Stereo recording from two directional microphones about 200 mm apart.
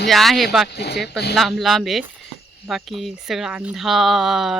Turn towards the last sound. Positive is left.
turn(degrees=0)  # may be behind; listen again after turning